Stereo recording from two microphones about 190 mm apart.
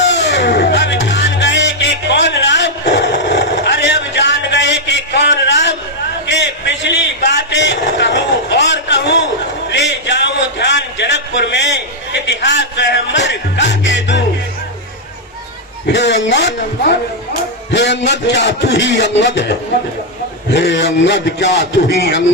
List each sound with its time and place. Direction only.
0.1 s music: 65° left (ahead or behind)
6.2 s a sound: 70° left (ahead or behind)
15.9 s a man's voice: 65° left (ahead or behind)